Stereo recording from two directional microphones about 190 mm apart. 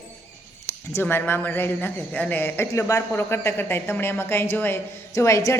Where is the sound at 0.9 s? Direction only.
10° left (ahead or behind).